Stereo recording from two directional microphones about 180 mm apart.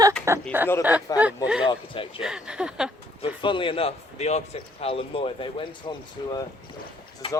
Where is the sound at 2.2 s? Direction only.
5° right (ahead or behind).